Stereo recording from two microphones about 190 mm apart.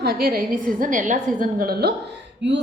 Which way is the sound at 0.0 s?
55° right (ahead or behind).